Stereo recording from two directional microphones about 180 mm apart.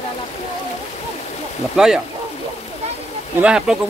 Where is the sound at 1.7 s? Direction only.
5° right (ahead or behind).